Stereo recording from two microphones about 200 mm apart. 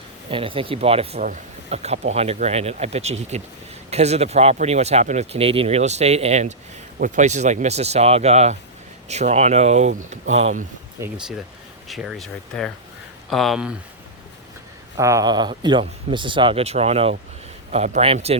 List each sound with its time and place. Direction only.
0.3 s speech: 25° right (ahead or behind)
11.0 s speech: 15° right (ahead or behind)
11.9 s speech: centre (ahead or behind)
14.9 s speech: 15° right (ahead or behind)